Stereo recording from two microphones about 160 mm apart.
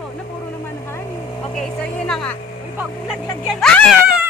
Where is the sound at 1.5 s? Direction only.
5° left (ahead or behind).